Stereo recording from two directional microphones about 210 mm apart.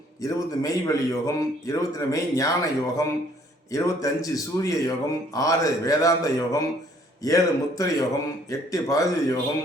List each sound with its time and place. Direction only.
0.2 s a man's voice: 15° left (ahead or behind)